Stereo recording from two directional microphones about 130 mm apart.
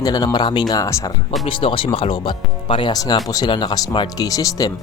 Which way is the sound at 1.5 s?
40° left (ahead or behind).